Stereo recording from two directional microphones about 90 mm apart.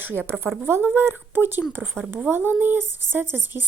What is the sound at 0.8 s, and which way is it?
Speech, 25° right (ahead or behind).